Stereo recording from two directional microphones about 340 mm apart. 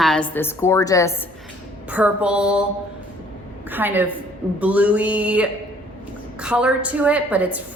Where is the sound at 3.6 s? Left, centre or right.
Centre.